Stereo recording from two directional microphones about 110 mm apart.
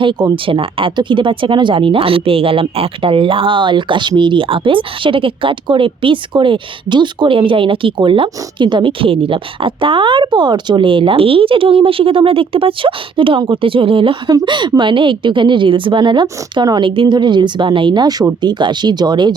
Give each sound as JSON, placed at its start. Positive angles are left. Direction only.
{"t": 0.0, "sound": "speech", "side_deg": -45}
{"t": 14.3, "sound": "speech", "side_deg": -40}